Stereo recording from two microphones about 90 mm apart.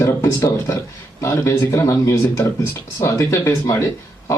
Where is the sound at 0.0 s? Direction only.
30° left (ahead or behind).